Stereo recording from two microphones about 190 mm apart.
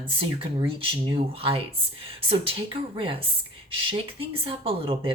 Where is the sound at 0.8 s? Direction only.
25° right (ahead or behind).